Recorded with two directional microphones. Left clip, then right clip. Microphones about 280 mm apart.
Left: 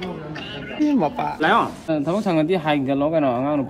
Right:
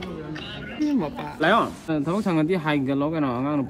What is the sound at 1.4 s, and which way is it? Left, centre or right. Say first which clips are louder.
Speech: left 1 dB; centre.